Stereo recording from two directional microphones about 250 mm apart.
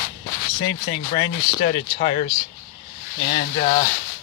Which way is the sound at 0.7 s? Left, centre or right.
Left.